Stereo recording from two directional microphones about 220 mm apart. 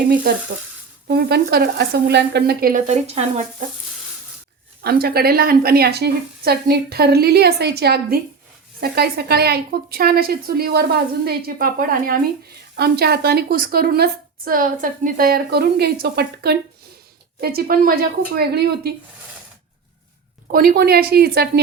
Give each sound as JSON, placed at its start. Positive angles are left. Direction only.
{"t": 1.0, "sound": "a woman's voice", "side_deg": -45}
{"t": 4.8, "sound": "a woman's voice", "side_deg": -45}
{"t": 20.5, "sound": "a woman's voice", "side_deg": -40}